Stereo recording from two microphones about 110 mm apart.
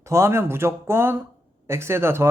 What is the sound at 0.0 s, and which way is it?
A woman's voice, 25° right (ahead or behind).